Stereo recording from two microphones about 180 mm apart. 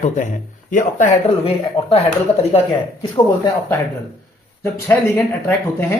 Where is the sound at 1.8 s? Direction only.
25° left (ahead or behind).